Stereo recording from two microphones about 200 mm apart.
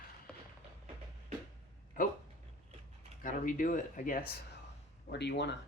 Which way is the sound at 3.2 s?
40° left (ahead or behind).